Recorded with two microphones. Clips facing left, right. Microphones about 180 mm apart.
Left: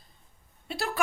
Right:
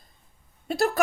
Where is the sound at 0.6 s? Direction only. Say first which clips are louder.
Right 10 dB; 45° right (ahead or behind).